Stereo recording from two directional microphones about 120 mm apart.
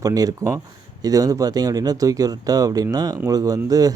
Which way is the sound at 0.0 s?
30° right (ahead or behind).